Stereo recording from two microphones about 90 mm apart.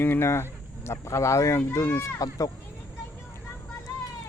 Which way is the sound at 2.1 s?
40° left (ahead or behind).